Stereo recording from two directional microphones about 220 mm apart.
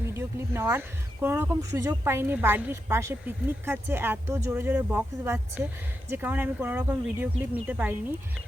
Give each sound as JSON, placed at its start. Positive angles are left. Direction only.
{"t": 0.1, "sound": "speech", "side_deg": -10}